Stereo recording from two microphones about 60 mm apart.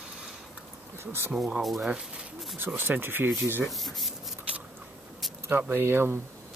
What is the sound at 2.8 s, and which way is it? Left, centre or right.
Speech, right.